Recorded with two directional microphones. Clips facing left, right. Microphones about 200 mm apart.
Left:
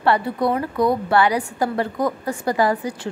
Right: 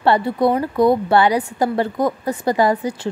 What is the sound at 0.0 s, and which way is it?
A woman's voice, 25° right (ahead or behind).